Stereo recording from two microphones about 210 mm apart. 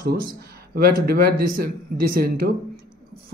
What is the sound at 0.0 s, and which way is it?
Speech, 45° right (ahead or behind).